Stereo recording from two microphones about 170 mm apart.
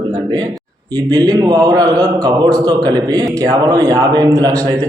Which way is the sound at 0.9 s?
25° right (ahead or behind).